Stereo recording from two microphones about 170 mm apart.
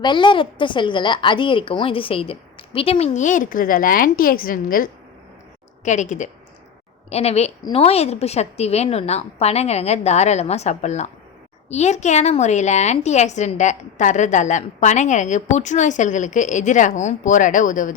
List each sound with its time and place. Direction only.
0.0 s a woman's voice: 30° left (ahead or behind); by 4.9 s 55° left (ahead or behind)
5.8 s a woman's voice: 45° left (ahead or behind)